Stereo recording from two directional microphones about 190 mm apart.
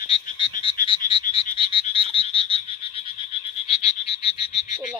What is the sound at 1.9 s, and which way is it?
Frog, 30° left (ahead or behind).